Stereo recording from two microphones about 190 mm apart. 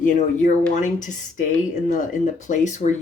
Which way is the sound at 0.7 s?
40° left (ahead or behind).